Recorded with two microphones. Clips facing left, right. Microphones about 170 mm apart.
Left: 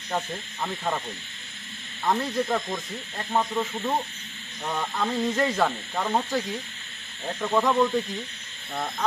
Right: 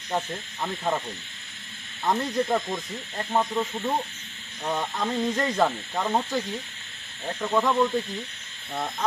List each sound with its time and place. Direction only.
0.1 s speech: 10° right (ahead or behind)
2.0 s speech: 10° right (ahead or behind)
3.3 s snake: centre (ahead or behind)
4.6 s speech: 10° right (ahead or behind)
5.1 s speech: 5° left (ahead or behind)
5.5 s speech: 5° right (ahead or behind)
7.4 s snake: centre (ahead or behind)
8.7 s speech: 5° right (ahead or behind)